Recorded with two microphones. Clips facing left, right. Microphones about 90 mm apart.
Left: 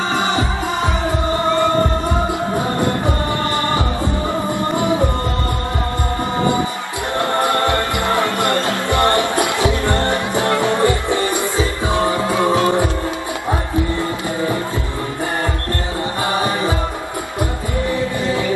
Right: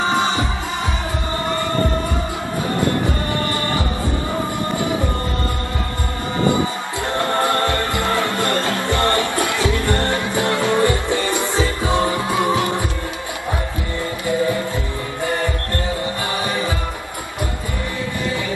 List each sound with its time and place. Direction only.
7.2 s music: 20° left (ahead or behind)
12.3 s music: 20° right (ahead or behind)
16.3 s music: 25° left (ahead or behind)